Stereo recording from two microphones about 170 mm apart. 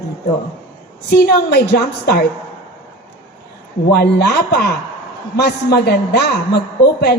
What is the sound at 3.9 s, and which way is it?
A woman's voice, 70° left (ahead or behind).